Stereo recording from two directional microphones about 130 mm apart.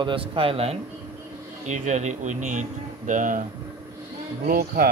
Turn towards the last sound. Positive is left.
turn(degrees=-90)